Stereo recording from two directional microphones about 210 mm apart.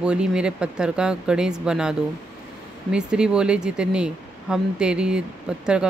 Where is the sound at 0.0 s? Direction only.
5° right (ahead or behind).